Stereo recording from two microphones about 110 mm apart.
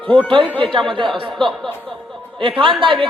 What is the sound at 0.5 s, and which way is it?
A man's voice, 50° right (ahead or behind).